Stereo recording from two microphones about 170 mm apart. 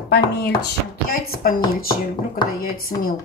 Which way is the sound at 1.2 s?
60° left (ahead or behind).